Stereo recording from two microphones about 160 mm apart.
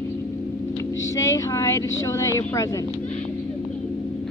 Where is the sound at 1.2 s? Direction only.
20° left (ahead or behind).